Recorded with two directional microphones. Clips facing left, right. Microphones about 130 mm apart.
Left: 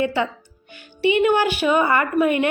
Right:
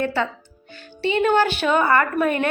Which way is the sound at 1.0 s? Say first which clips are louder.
Left 1 dB; 15° left (ahead or behind).